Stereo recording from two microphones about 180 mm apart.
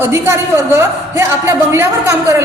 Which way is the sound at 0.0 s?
15° right (ahead or behind).